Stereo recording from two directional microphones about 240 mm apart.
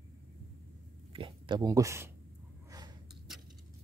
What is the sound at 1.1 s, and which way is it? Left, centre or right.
Speech, right.